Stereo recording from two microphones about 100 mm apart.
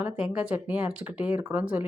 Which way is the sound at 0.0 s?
10° right (ahead or behind).